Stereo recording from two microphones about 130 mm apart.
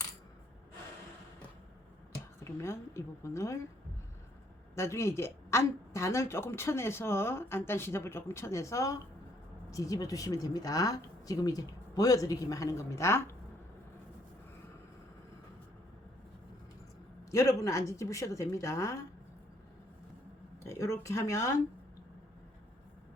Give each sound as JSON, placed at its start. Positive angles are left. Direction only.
{"t": 2.4, "sound": "a woman's voice", "side_deg": 20}
{"t": 4.7, "sound": "a woman's voice", "side_deg": 20}
{"t": 17.6, "sound": "a woman's voice", "side_deg": 25}
{"t": 20.7, "sound": "a woman's voice", "side_deg": 20}